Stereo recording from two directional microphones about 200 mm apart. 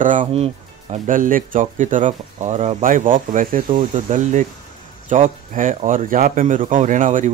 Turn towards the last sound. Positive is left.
turn(degrees=-40)  # may be behind; listen again after turning